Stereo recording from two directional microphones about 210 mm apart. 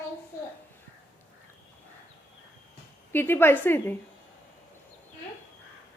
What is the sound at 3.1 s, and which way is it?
Speech, 10° left (ahead or behind).